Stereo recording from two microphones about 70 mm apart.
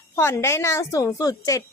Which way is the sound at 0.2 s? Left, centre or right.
Left.